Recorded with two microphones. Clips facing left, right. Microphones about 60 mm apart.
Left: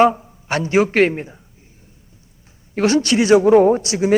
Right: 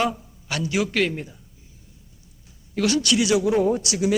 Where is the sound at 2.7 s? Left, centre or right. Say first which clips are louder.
Left 5 dB; left.